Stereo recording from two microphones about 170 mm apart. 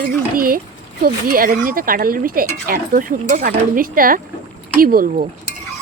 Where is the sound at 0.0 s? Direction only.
55° right (ahead or behind).